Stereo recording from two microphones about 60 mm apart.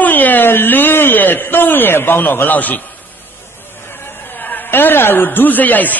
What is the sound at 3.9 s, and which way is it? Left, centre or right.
A man's voice, left.